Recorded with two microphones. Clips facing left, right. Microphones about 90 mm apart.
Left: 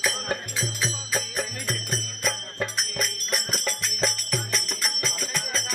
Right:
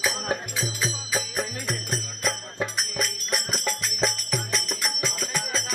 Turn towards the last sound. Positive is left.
turn(degrees=0)  # may be behind; listen again after turning